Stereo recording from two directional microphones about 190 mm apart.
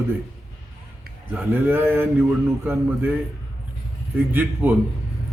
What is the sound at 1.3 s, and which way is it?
Speech, 10° right (ahead or behind).